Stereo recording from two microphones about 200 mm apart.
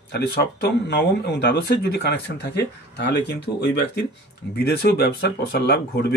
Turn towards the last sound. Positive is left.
turn(degrees=55)  # may be behind; listen again after turning